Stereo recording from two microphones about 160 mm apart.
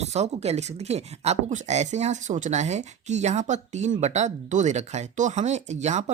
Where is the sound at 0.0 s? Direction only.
45° right (ahead or behind).